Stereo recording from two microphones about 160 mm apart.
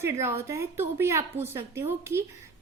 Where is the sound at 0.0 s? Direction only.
15° right (ahead or behind).